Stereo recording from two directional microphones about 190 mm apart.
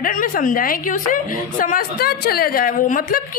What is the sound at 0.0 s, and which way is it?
Speech, 45° left (ahead or behind).